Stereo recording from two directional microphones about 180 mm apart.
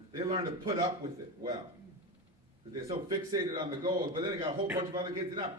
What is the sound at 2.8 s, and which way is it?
A man's voice, 20° right (ahead or behind).